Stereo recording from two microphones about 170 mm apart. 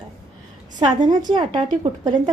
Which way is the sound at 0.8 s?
25° right (ahead or behind).